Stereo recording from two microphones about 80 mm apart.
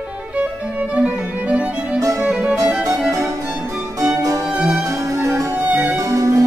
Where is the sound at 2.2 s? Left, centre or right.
Centre.